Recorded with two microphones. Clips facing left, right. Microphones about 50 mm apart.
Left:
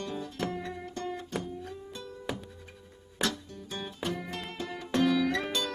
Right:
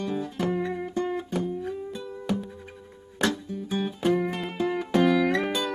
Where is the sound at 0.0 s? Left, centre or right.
Centre.